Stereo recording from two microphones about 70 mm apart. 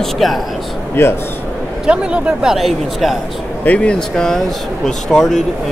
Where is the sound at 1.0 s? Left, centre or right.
Left.